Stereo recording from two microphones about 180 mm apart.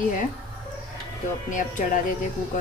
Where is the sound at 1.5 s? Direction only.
45° left (ahead or behind).